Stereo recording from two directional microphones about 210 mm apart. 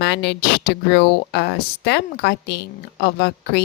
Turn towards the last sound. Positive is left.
turn(degrees=50)  # may be behind; listen again after turning